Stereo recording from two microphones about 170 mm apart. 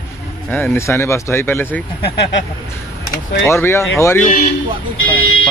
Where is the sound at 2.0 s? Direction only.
80° left.